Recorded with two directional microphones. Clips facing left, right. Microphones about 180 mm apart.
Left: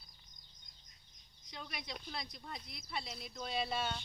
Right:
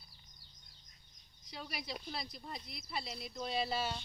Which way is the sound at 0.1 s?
35° right (ahead or behind).